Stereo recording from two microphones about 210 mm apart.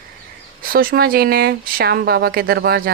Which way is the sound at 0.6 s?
45° right (ahead or behind).